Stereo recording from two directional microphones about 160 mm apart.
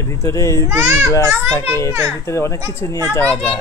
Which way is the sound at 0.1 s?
20° left (ahead or behind).